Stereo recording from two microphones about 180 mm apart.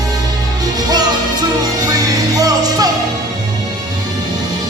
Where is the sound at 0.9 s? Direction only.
20° right (ahead or behind).